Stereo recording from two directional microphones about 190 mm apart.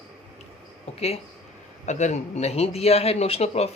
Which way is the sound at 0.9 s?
35° left (ahead or behind).